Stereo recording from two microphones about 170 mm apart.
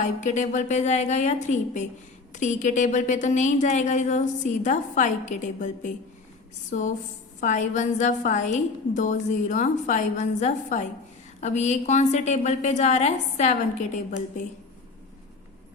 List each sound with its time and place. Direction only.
0.0 s speech: 45° left (ahead or behind)